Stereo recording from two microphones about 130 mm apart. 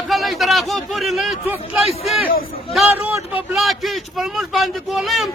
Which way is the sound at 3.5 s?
Centre (ahead or behind).